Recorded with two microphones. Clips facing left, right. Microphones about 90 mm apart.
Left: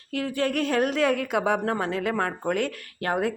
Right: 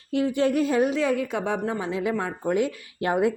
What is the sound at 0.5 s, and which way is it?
Speech, 65° left (ahead or behind).